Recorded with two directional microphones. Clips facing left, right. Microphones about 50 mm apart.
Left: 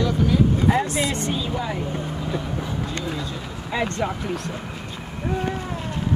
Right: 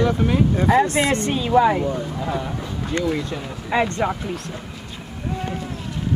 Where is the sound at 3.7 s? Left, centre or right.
Right.